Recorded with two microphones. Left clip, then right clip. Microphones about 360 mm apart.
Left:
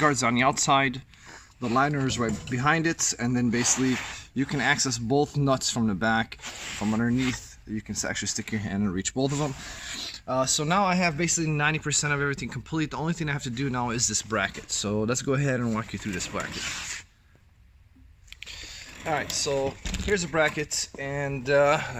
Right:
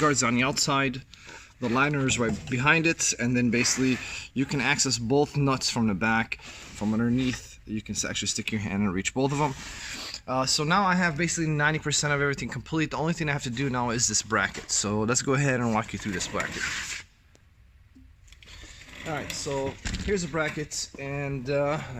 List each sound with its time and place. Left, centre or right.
0.0 s speech: centre
19.0 s speech: left